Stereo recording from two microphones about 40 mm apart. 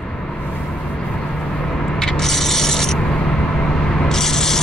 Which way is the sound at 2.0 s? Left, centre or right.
Centre.